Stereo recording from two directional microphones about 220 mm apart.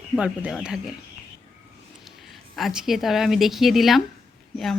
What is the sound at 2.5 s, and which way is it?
Speech, centre (ahead or behind).